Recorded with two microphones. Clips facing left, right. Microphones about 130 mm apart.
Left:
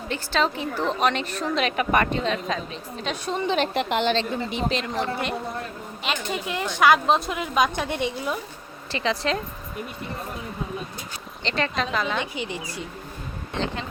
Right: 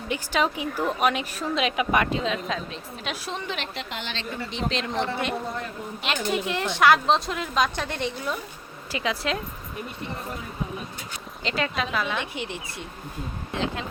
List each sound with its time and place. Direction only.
0.1 s a woman's voice: 10° right (ahead or behind)
3.8 s a woman's voice: 60° left (ahead or behind)
4.5 s a woman's voice: centre (ahead or behind)
8.9 s a woman's voice: 10° right (ahead or behind)
11.4 s a woman's voice: 5° right (ahead or behind)